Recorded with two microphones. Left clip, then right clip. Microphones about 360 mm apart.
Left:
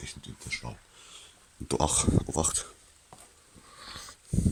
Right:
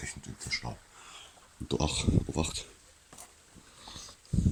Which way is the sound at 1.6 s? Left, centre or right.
Centre.